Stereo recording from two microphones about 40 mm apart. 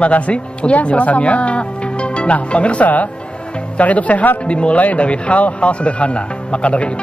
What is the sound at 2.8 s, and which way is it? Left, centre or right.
Speech, left.